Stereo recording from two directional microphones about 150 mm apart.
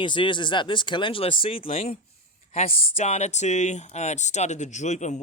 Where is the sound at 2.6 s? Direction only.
55° left (ahead or behind).